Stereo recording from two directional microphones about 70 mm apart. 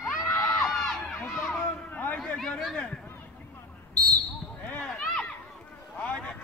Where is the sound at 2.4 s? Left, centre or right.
Centre.